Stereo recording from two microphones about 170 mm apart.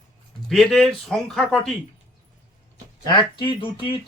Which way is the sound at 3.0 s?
25° left (ahead or behind).